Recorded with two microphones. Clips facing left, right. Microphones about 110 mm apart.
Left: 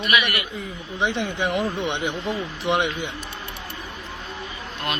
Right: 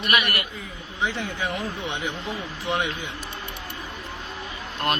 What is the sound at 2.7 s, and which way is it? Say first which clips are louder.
Speech: left 4 dB; 20° left (ahead or behind).